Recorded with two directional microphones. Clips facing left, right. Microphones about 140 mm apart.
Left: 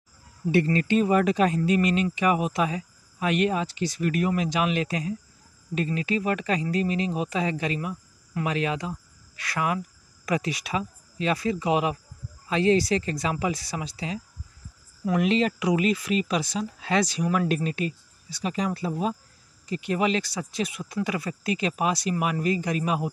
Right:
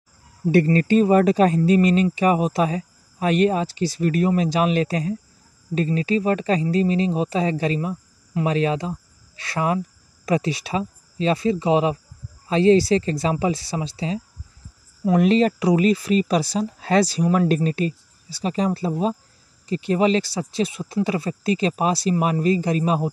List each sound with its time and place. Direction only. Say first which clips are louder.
0.5 s speech: right 5 dB; 40° right (ahead or behind)